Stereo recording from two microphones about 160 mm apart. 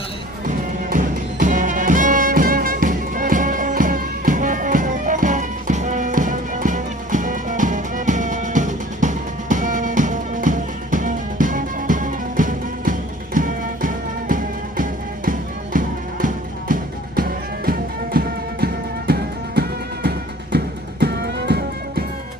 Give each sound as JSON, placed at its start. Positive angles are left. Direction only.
{"t": 0.4, "sound": "music", "side_deg": -55}